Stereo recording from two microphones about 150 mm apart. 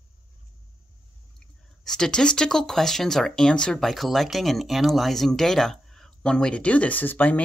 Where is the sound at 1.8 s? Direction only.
5° left (ahead or behind).